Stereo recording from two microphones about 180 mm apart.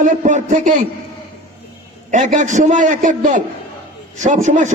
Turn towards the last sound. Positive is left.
turn(degrees=-40)  # may be behind; listen again after turning